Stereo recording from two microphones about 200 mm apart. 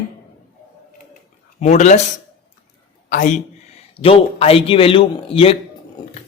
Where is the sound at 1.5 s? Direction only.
35° left (ahead or behind).